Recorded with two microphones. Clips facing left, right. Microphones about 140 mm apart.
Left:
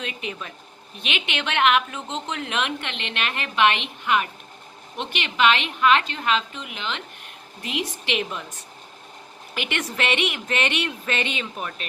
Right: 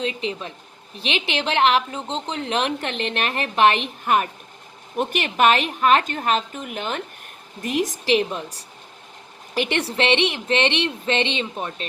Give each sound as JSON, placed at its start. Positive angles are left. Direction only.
{"t": 0.0, "sound": "a woman's voice", "side_deg": -30}